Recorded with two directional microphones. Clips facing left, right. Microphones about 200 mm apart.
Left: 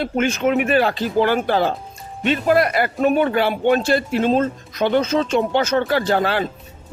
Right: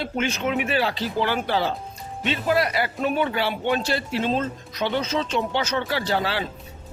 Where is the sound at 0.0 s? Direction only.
50° left (ahead or behind).